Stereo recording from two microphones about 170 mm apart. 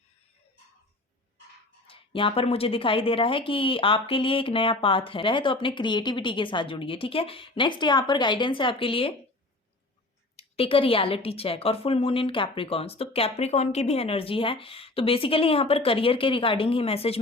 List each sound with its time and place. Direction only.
1.9 s speech: 30° left (ahead or behind)
10.3 s speech: 35° left (ahead or behind)